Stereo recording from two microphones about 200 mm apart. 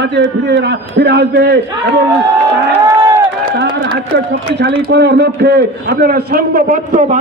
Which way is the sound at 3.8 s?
60° right (ahead or behind).